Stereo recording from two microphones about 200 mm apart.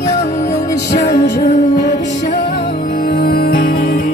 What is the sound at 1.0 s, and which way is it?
Music, 55° left (ahead or behind).